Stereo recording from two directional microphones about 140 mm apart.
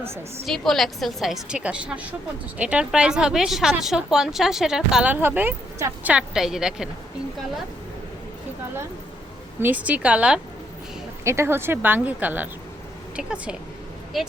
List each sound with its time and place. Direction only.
0.0 s speech: 15° right (ahead or behind)
0.4 s a woman's voice: centre (ahead or behind)
9.6 s speech: 10° right (ahead or behind)
11.2 s speech: 20° right (ahead or behind)